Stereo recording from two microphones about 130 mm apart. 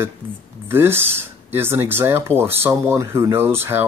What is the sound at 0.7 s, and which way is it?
Speech, 20° right (ahead or behind).